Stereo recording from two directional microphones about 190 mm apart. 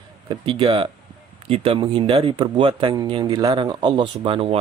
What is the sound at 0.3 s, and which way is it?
Speech, 25° right (ahead or behind).